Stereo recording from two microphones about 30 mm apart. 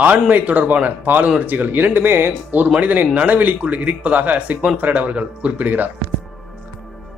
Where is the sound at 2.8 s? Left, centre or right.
Right.